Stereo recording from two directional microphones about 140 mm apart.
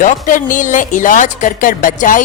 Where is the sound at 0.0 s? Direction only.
70° left (ahead or behind).